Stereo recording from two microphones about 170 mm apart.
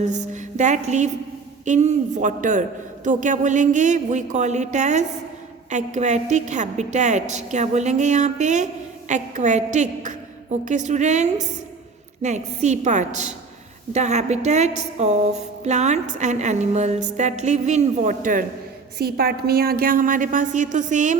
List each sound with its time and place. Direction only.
0.0 s a sound: 45° right (ahead or behind)
1.6 s a woman's voice: 45° right (ahead or behind)
18.9 s a woman's voice: 65° right (ahead or behind); by 21.2 s 45° right (ahead or behind)